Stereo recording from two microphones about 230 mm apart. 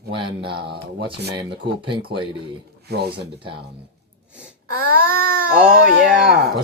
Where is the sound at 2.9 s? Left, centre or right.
Right.